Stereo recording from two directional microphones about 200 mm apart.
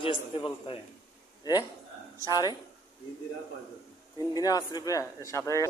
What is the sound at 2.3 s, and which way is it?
Speech, 20° left (ahead or behind).